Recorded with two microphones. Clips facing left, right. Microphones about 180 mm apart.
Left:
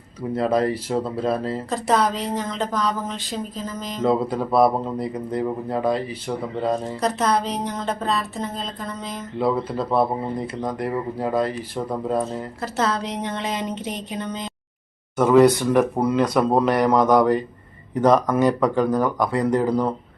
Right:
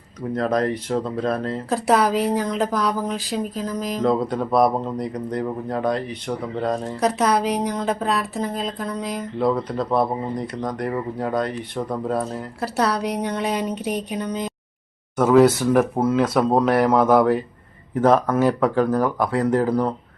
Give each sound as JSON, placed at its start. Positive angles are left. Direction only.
{"t": 0.3, "sound": "speech", "side_deg": 5}
{"t": 12.9, "sound": "speech", "side_deg": -15}
{"t": 15.1, "sound": "speech", "side_deg": 0}